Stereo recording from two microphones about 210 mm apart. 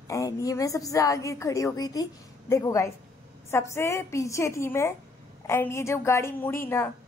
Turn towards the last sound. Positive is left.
turn(degrees=10)  # may be behind; listen again after turning